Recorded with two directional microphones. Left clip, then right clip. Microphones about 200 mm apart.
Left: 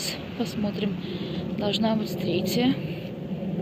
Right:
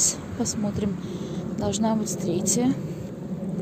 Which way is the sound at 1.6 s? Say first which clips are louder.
Even; 20° right (ahead or behind).